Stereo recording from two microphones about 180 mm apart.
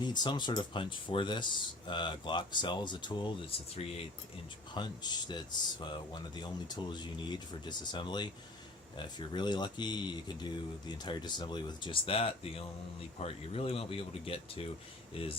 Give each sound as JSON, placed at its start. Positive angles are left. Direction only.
{"t": 0.0, "sound": "speech", "side_deg": 25}